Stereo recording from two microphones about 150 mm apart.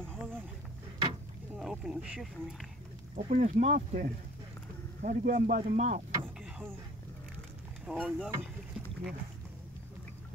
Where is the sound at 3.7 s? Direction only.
70° right (ahead or behind).